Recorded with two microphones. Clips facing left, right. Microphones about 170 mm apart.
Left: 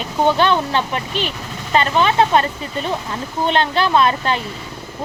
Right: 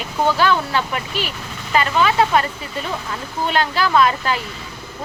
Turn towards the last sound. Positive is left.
turn(degrees=25)  # may be behind; listen again after turning